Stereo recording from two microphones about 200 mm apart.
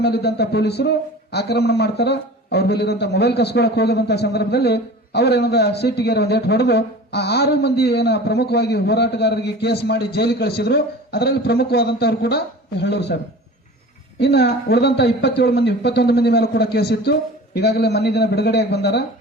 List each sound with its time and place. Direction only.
0.0 s a man's voice: 55° left (ahead or behind)
14.2 s a man's voice: 55° left (ahead or behind)